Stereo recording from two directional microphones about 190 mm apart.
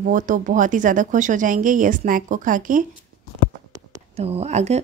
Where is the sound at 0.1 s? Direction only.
45° right (ahead or behind).